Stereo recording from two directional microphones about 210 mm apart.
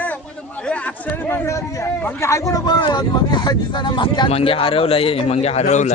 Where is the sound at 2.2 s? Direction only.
15° left (ahead or behind).